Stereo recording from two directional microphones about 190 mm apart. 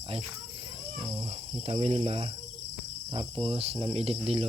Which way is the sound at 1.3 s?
30° right (ahead or behind).